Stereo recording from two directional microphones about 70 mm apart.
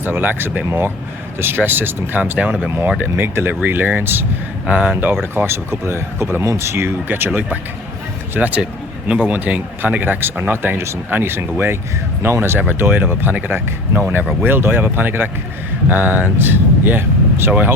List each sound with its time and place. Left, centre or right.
0.0 s speech: right
4.6 s speech: centre
5.3 s speech: right